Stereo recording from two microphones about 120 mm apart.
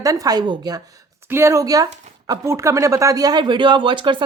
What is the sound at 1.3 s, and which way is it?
A woman's voice, 20° right (ahead or behind).